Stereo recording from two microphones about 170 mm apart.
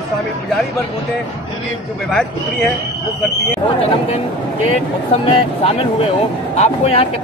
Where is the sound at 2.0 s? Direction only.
Centre (ahead or behind).